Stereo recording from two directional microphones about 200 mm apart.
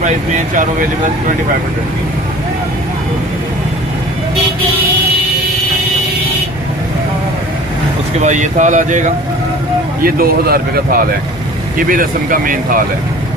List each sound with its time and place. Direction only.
8.2 s speech: 35° right (ahead or behind)
10.0 s speech: 50° right (ahead or behind)